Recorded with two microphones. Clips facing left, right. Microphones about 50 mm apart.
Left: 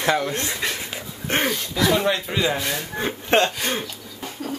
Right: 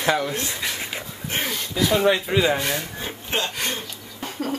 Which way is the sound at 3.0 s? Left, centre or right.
Left.